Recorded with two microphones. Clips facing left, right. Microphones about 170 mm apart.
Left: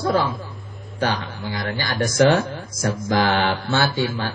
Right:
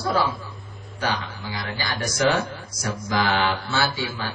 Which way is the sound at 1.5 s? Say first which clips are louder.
Left 5 dB; 50° left (ahead or behind).